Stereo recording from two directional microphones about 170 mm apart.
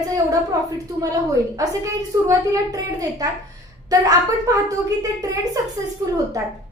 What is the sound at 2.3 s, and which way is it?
A woman's voice, 20° right (ahead or behind).